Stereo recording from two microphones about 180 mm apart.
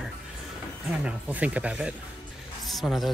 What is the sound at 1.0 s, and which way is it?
Speech, 10° right (ahead or behind).